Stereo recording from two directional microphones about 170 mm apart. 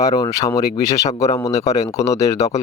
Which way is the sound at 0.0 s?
20° left (ahead or behind).